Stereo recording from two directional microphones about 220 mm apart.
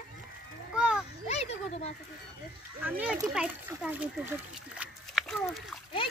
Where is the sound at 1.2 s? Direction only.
30° left (ahead or behind).